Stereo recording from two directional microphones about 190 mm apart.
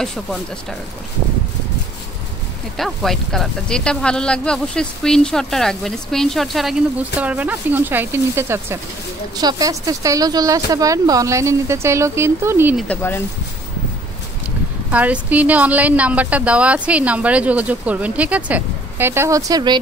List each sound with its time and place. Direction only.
0.0 s speech: 5° left (ahead or behind)
2.8 s a woman's voice: centre (ahead or behind)
12.7 s speech: 10° left (ahead or behind)
14.9 s a woman's voice: 10° right (ahead or behind)